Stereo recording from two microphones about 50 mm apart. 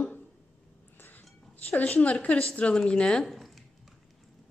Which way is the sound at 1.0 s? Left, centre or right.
Left.